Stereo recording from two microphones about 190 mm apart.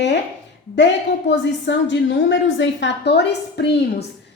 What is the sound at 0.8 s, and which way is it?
A woman's voice, 70° left (ahead or behind).